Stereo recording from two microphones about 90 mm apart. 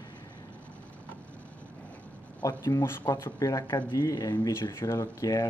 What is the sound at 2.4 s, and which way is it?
Speech, 40° left (ahead or behind).